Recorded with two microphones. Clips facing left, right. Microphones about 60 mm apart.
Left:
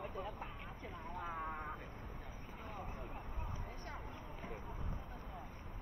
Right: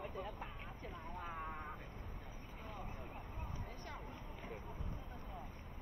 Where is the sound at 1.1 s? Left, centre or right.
Left.